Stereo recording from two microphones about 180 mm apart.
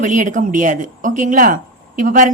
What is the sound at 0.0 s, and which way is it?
A woman's voice, 45° right (ahead or behind).